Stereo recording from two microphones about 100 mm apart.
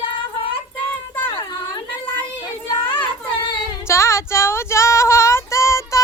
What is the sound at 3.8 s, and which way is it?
Female singing, 30° left (ahead or behind).